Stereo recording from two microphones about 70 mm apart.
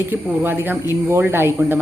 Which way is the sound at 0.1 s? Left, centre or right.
Right.